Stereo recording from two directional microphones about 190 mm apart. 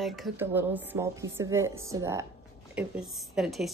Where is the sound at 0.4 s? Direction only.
10° right (ahead or behind).